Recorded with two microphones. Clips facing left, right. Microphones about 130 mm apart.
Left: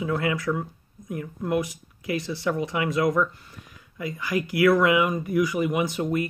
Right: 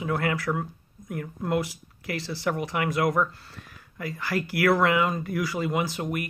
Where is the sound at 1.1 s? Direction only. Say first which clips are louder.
Left 1 dB; 20° left (ahead or behind).